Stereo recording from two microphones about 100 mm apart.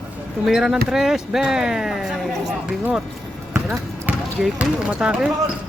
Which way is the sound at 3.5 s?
20° right (ahead or behind).